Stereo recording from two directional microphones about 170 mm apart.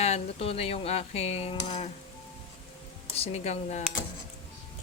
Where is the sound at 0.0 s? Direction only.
35° left (ahead or behind).